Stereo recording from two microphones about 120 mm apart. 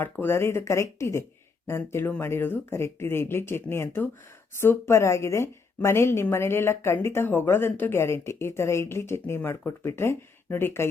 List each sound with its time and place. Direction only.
0.0 s a woman's voice: 20° left (ahead or behind)